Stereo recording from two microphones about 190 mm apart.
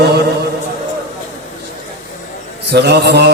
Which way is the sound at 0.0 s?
60° right (ahead or behind).